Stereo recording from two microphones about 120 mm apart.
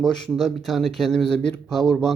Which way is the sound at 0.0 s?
5° left (ahead or behind).